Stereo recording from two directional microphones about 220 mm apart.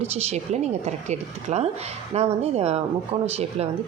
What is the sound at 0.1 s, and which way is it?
Speech, 30° right (ahead or behind).